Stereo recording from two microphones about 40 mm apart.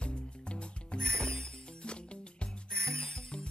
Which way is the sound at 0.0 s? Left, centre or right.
Left.